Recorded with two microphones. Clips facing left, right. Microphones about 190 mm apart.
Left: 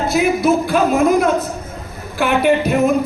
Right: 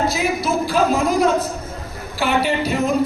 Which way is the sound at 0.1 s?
55° left (ahead or behind).